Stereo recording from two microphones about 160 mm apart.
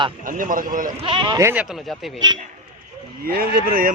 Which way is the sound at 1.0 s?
30° right (ahead or behind).